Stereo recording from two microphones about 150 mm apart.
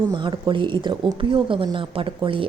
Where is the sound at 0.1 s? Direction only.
30° right (ahead or behind).